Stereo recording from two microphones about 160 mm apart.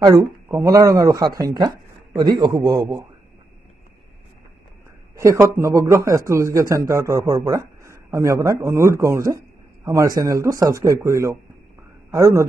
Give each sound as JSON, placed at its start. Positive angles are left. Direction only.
{"t": 0.0, "sound": "a man's voice", "side_deg": -20}
{"t": 5.1, "sound": "a man's voice", "side_deg": -20}